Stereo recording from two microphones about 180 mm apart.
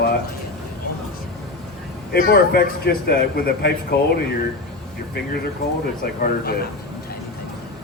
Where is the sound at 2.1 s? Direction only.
55° left (ahead or behind).